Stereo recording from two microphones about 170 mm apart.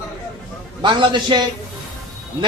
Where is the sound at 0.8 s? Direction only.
30° right (ahead or behind).